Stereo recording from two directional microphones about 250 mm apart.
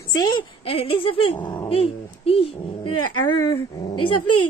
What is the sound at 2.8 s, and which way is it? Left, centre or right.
Speech, left.